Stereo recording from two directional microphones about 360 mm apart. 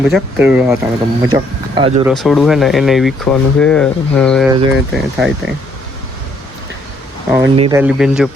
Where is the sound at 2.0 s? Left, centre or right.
Centre.